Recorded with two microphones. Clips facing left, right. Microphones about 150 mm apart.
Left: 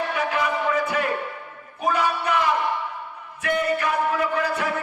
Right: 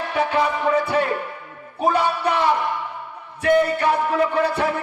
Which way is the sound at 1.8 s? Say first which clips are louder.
Right 4 dB; 30° right (ahead or behind).